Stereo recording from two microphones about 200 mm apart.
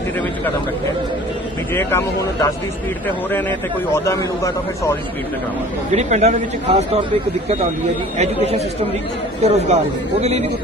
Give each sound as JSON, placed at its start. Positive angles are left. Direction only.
{"t": 1.7, "sound": "a man's voice", "side_deg": 10}
{"t": 3.9, "sound": "a man's voice", "side_deg": 15}
{"t": 5.9, "sound": "speech", "side_deg": -35}
{"t": 8.2, "sound": "speech", "side_deg": -35}